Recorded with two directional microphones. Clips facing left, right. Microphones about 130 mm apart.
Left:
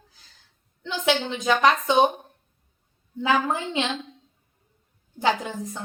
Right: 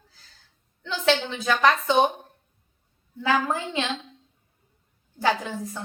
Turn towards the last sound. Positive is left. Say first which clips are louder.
# left 1 dB
turn(degrees=20)  # may be behind; listen again after turning